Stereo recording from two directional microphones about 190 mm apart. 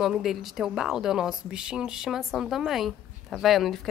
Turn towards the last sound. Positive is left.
turn(degrees=0)  # may be behind; listen again after turning